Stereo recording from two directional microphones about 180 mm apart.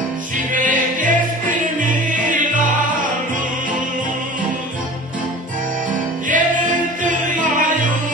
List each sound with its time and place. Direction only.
0.5 s music: 45° right (ahead or behind)
6.2 s music: 45° right (ahead or behind)